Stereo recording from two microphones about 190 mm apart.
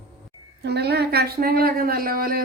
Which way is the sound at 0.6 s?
60° right (ahead or behind).